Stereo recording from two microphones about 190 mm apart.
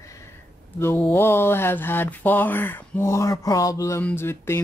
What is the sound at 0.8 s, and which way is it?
Speech, 10° left (ahead or behind).